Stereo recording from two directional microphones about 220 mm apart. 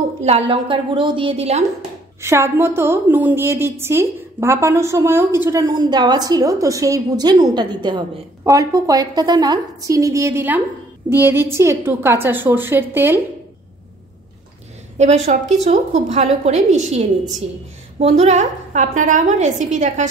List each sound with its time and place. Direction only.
0.2 s a woman's voice: 25° right (ahead or behind)
2.2 s a woman's voice: 10° right (ahead or behind)
15.0 s a woman's voice: 30° right (ahead or behind)